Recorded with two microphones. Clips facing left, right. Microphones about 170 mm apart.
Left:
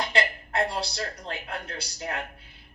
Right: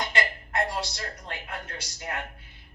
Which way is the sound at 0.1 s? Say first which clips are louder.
Left 2 dB; 30° left (ahead or behind).